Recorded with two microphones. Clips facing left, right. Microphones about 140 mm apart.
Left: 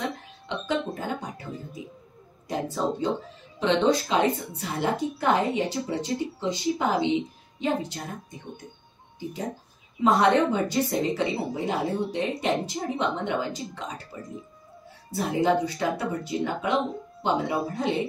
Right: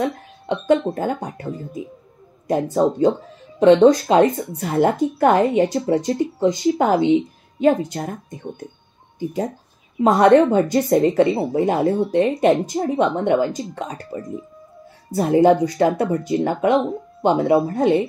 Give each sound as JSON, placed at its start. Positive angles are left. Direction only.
{"t": 0.5, "sound": "a woman's voice", "side_deg": -45}
{"t": 10.0, "sound": "a woman's voice", "side_deg": -50}
{"t": 15.1, "sound": "a woman's voice", "side_deg": -50}